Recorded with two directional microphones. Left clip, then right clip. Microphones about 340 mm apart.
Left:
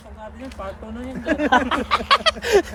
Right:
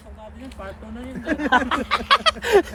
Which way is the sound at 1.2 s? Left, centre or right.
Centre.